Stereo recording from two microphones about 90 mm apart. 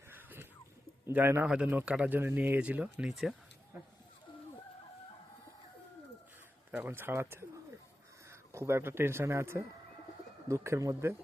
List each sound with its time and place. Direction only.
0.1 s a sound: 20° right (ahead or behind)
1.1 s speech: 20° right (ahead or behind)
3.7 s speech: 20° right (ahead or behind)
6.7 s speech: 20° right (ahead or behind)